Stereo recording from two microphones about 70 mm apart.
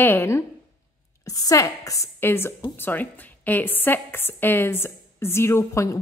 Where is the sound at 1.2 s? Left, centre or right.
Left.